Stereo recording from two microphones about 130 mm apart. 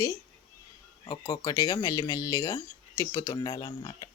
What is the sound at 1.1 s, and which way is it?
Speech, 30° left (ahead or behind).